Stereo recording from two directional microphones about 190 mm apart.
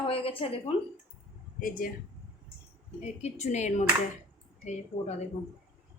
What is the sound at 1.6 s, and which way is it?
Speech, 45° left (ahead or behind).